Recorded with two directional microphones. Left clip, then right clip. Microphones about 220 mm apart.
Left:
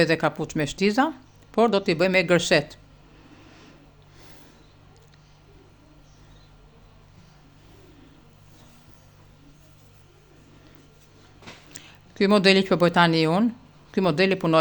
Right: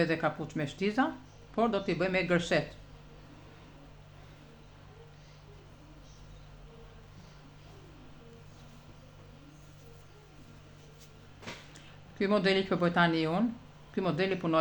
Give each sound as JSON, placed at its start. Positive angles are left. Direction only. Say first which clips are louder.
{"t": 0.0, "sound": "speech", "louder": "left 8 dB", "side_deg": 50}
{"t": 11.7, "sound": "speech", "louder": "left 7 dB", "side_deg": 50}